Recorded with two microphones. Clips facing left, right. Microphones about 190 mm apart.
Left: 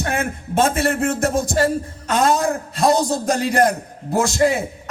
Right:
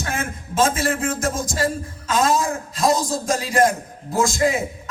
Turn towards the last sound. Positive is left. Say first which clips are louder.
# left 1 dB
turn(degrees=65)  # may be behind; listen again after turning